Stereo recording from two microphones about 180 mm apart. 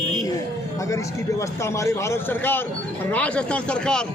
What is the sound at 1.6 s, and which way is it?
A man's voice, 15° left (ahead or behind).